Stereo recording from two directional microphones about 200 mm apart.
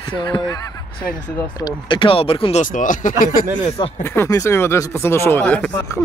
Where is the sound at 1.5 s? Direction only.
20° left (ahead or behind).